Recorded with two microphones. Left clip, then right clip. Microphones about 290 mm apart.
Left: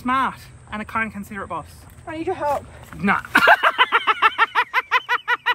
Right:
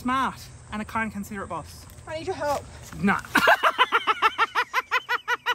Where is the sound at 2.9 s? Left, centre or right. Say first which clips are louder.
Left 5 dB; centre.